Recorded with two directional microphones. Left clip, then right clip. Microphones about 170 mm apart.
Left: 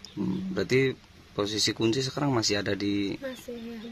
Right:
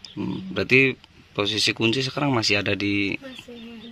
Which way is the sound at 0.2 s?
10° right (ahead or behind).